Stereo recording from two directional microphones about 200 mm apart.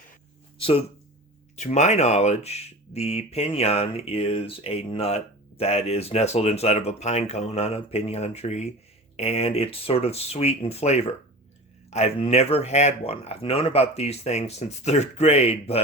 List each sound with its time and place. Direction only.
0.6 s speech: 30° left (ahead or behind)